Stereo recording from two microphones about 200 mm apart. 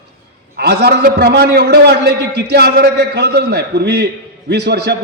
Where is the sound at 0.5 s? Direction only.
55° right (ahead or behind).